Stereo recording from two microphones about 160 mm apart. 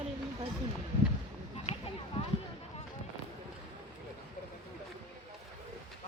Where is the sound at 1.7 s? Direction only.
45° left (ahead or behind).